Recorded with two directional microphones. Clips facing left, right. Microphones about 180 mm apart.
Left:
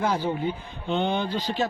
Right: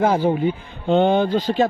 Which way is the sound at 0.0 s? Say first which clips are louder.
Right 8 dB; 50° right (ahead or behind).